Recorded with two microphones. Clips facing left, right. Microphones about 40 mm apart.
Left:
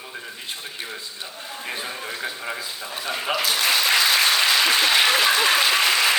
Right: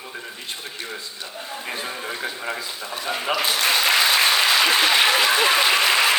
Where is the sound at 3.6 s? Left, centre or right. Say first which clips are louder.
Right 1 dB; centre.